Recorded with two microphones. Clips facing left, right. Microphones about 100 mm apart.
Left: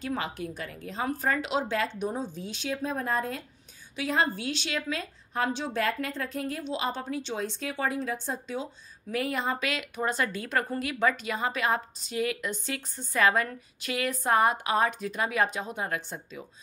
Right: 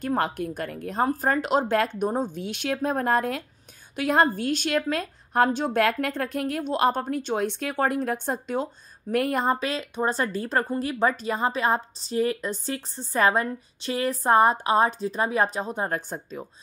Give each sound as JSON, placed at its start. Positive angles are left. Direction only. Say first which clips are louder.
{"t": 0.0, "sound": "speech", "louder": "right 7 dB", "side_deg": -50}
{"t": 1.0, "sound": "speech", "louder": "right 4 dB", "side_deg": -40}
{"t": 2.4, "sound": "a woman's voice", "louder": "right 5 dB", "side_deg": -65}
{"t": 3.9, "sound": "a woman's voice", "louder": "right 6 dB", "side_deg": -55}
{"t": 9.6, "sound": "speech", "louder": "right 4 dB", "side_deg": -35}